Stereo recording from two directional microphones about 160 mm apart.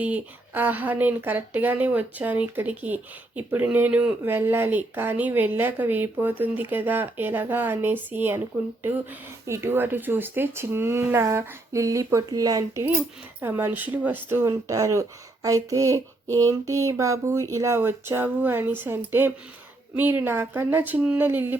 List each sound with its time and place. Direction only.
0.0 s speech: 10° right (ahead or behind)
9.5 s speech: 15° right (ahead or behind)
15.4 s a sound: 20° right (ahead or behind)
19.9 s speech: 10° right (ahead or behind)